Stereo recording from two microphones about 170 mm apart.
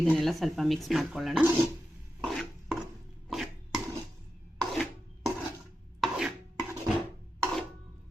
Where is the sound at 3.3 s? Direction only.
5° right (ahead or behind).